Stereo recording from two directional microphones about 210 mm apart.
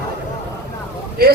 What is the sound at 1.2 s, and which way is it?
Speech, 45° right (ahead or behind).